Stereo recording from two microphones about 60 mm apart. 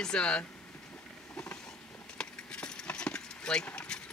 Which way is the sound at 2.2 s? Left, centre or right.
Centre.